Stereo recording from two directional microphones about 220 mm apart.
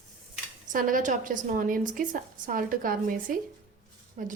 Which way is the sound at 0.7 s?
35° right (ahead or behind).